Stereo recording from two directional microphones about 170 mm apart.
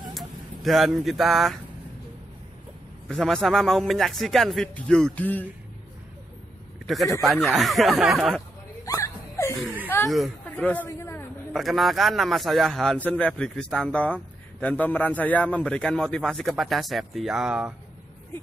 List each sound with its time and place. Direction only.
0.1 s fowl: centre (ahead or behind)
3.1 s a man's voice: centre (ahead or behind)
7.2 s a man's voice: centre (ahead or behind)
8.8 s hiccup: 20° left (ahead or behind)
10.0 s speech: centre (ahead or behind)
10.9 s a sound: 15° left (ahead or behind)
11.5 s a man's voice: centre (ahead or behind)